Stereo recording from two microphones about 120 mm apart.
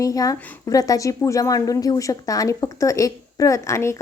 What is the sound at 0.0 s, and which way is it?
A woman's voice, 30° left (ahead or behind).